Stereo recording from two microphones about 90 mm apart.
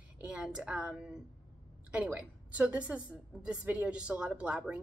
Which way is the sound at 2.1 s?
15° right (ahead or behind).